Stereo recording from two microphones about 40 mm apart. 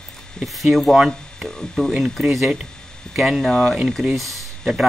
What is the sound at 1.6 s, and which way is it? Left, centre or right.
Speech, centre.